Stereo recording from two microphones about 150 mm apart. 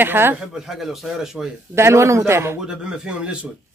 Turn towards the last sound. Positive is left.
turn(degrees=-5)  # may be behind; listen again after turning